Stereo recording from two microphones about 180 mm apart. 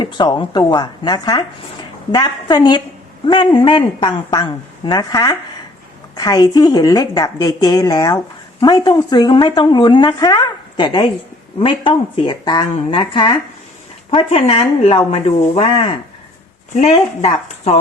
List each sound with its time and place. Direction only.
0.0 s speech: 25° left (ahead or behind)